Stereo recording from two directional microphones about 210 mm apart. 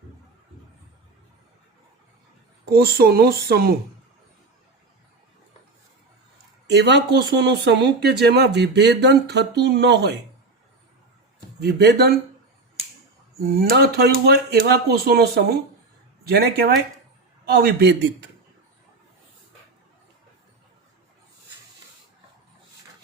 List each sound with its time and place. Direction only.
2.6 s speech: 45° right (ahead or behind)
6.7 s speech: 55° right (ahead or behind)
11.6 s speech: 50° right (ahead or behind)
13.4 s speech: 45° right (ahead or behind)